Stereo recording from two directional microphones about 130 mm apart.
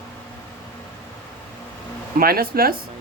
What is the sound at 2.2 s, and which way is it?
Speech, 90° right.